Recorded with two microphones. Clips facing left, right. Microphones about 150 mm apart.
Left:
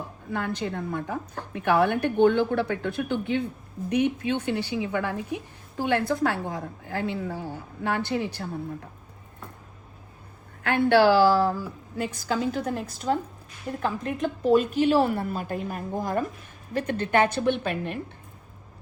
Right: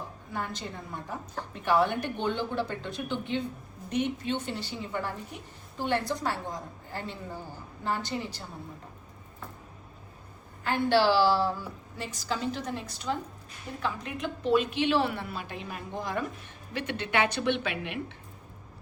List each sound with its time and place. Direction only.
0.3 s a woman's voice: 60° left (ahead or behind); by 5.4 s 80° left
5.9 s a woman's voice: 55° left (ahead or behind)
10.6 s a woman's voice: 65° left (ahead or behind); by 17.9 s 45° left (ahead or behind)